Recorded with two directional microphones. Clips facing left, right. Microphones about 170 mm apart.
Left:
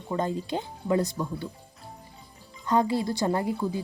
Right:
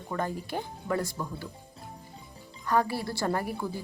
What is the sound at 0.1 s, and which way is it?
A woman's voice, 20° left (ahead or behind).